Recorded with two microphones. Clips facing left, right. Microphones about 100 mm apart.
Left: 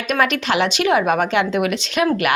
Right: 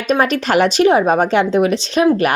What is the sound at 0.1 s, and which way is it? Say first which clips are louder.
Speech: right 4 dB; 35° right (ahead or behind).